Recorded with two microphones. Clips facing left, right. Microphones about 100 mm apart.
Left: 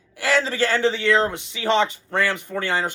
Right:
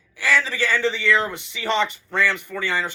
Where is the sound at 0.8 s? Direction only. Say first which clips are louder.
Left 3 dB; 15° left (ahead or behind).